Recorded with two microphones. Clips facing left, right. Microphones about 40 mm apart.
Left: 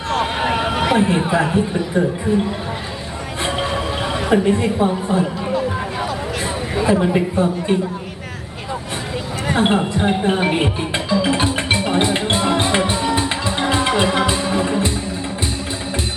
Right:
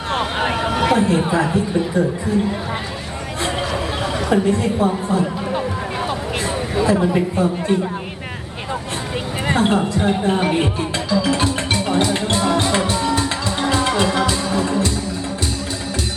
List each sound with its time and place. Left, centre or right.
0.5 s chatter: centre
1.3 s a woman's voice: left
3.4 s a sound: left
4.0 s a woman's voice: left
6.8 s a woman's voice: left
9.6 s music: left